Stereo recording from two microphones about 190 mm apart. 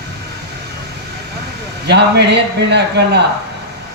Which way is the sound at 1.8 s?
60° right (ahead or behind).